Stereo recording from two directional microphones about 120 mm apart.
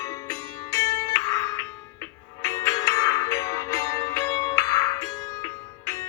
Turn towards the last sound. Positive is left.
turn(degrees=30)  # may be behind; listen again after turning